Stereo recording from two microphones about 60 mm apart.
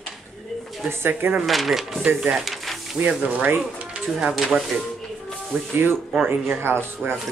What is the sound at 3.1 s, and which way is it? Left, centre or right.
Speech, right.